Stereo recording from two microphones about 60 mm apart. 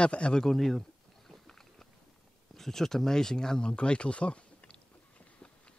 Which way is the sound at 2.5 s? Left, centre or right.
Centre.